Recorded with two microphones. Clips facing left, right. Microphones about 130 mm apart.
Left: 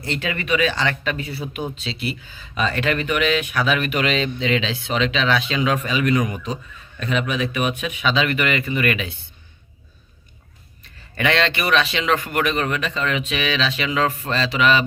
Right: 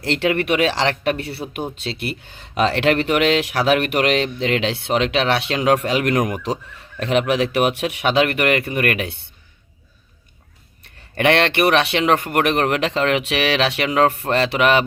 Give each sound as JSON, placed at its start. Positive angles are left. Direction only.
{"t": 0.0, "sound": "speech", "side_deg": -80}
{"t": 11.1, "sound": "speech", "side_deg": -60}